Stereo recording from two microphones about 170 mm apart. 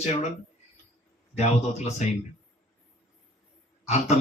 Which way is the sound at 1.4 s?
40° left (ahead or behind).